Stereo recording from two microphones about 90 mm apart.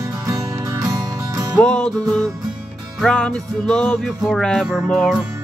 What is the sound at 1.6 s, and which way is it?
Music, 15° left (ahead or behind).